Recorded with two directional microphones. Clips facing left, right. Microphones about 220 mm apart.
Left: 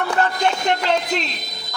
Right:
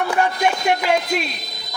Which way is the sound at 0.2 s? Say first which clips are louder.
Even; 10° right (ahead or behind).